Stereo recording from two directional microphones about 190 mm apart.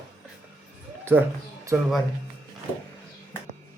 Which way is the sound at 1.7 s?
10° right (ahead or behind).